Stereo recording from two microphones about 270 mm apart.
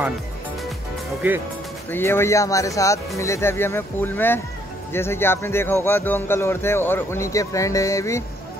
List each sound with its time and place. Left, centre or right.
1.2 s speech: centre
1.9 s speech: centre